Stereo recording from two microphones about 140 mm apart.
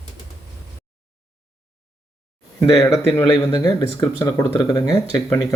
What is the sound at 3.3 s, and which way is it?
Speech, 30° left (ahead or behind).